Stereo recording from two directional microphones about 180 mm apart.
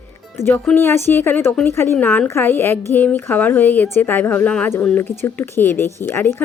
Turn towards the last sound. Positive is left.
turn(degrees=10)  # may be behind; listen again after turning